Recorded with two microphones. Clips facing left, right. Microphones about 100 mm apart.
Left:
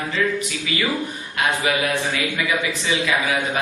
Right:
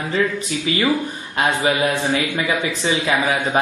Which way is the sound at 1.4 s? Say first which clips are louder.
Right 3 dB; 30° right (ahead or behind).